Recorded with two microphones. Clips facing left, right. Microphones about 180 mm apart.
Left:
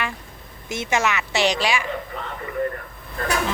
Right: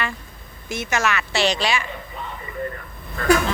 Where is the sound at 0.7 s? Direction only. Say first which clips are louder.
Left 1 dB; 25° left (ahead or behind).